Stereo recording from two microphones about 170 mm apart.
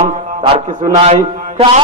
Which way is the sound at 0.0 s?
35° right (ahead or behind).